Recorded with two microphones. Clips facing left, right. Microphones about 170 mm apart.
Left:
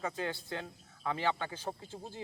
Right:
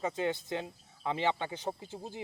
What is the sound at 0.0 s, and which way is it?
Speech, 20° right (ahead or behind).